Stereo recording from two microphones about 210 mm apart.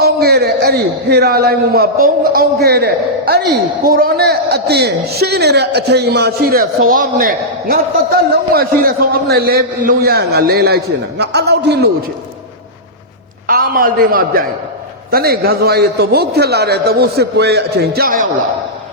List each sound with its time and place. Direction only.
0.0 s a man's voice: 50° right (ahead or behind)
13.5 s a man's voice: 45° right (ahead or behind)